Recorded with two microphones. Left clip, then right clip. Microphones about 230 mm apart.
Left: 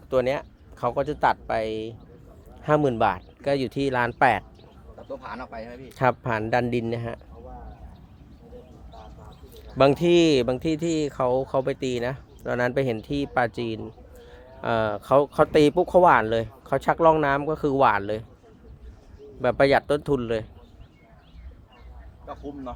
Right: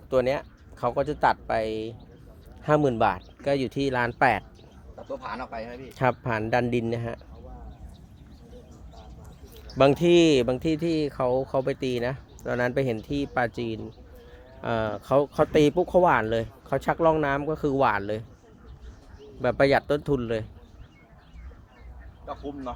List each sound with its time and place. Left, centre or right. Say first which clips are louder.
0.1 s speech: left 1 dB; centre
4.9 s speech: right 2 dB; centre
5.9 s speech: left 2 dB; centre
9.6 s speech: left 1 dB; centre
19.4 s speech: left 2 dB; centre